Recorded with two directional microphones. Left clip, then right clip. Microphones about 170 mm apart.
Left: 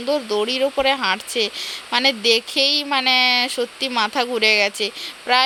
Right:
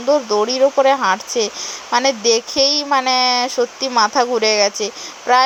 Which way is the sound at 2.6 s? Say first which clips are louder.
Right 3 dB; 30° left (ahead or behind).